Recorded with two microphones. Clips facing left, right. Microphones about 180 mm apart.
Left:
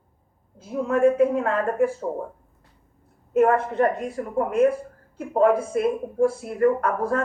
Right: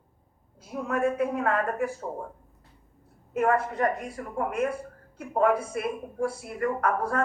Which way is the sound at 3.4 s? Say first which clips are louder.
Left 4 dB; 30° left (ahead or behind).